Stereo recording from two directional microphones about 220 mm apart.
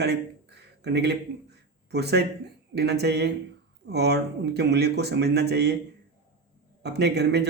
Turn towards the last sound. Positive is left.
turn(degrees=-50)  # may be behind; listen again after turning